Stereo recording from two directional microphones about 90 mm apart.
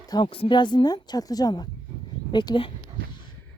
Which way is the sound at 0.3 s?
75° left (ahead or behind).